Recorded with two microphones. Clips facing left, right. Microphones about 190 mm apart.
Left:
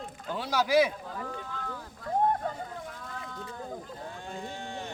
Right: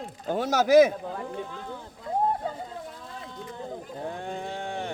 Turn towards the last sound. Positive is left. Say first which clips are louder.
# right 5 dB
turn(degrees=-55)  # may be behind; listen again after turning